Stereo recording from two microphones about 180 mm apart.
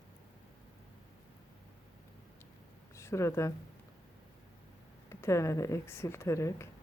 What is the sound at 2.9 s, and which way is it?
Speech, 15° left (ahead or behind).